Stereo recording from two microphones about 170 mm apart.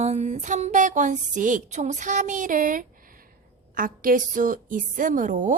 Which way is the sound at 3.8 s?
55° right (ahead or behind).